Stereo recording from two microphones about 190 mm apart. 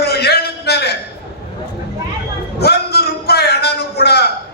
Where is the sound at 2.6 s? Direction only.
55° left (ahead or behind).